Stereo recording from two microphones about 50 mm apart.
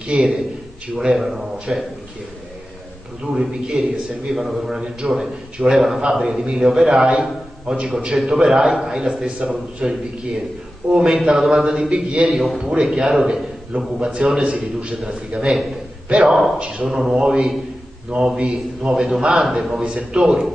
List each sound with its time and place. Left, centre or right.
0.0 s a man's voice: centre
3.3 s a man's voice: centre
16.3 s a man's voice: centre
16.5 s a man's voice: centre
16.8 s a man's voice: centre